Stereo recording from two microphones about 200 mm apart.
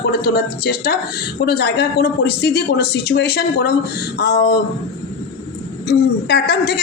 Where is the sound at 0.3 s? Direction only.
50° left (ahead or behind).